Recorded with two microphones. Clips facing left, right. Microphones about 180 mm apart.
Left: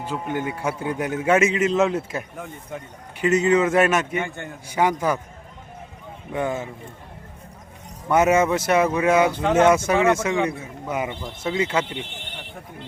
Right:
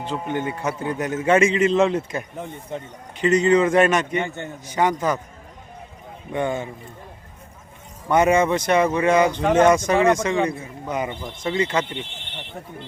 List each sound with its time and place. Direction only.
0.0 s a man's voice: 10° left (ahead or behind)
4.2 s a man's voice: 20° right (ahead or behind)
4.6 s a man's voice: 10° left (ahead or behind)
6.3 s speech: 5° left (ahead or behind)
8.1 s a man's voice: 5° left (ahead or behind)